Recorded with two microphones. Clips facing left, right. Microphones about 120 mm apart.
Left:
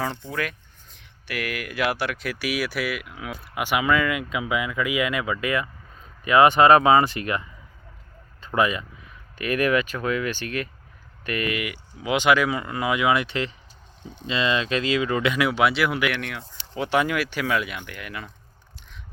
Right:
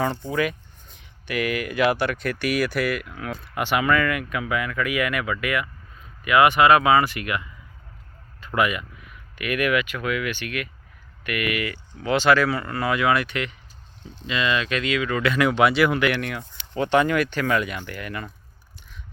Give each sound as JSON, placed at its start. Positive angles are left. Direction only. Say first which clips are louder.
{"t": 0.3, "sound": "speech", "louder": "right 5 dB", "side_deg": 0}
{"t": 11.6, "sound": "speech", "louder": "right 2 dB", "side_deg": 15}
{"t": 15.4, "sound": "speech", "louder": "right 5 dB", "side_deg": 5}